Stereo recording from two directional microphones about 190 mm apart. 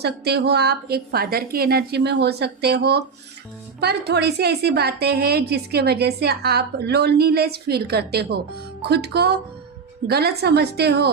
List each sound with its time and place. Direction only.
0.0 s a woman's voice: 60° right (ahead or behind)